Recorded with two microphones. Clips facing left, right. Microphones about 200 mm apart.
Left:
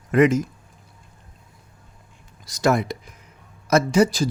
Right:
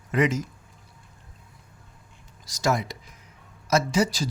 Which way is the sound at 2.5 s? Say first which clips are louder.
Left 5 dB; 60° left (ahead or behind).